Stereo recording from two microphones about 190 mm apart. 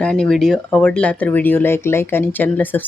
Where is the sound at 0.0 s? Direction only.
5° left (ahead or behind).